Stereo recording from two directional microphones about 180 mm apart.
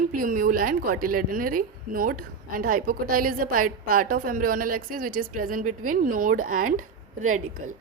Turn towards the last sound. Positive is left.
turn(degrees=-45)  # may be behind; listen again after turning